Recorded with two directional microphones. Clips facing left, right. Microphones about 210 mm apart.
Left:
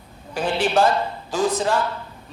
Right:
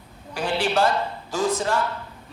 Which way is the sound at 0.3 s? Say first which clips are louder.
Left 3 dB; 20° left (ahead or behind).